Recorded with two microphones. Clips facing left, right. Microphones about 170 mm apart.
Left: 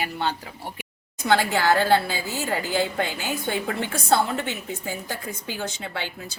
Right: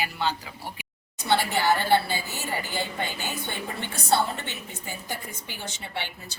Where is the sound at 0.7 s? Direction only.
90° left.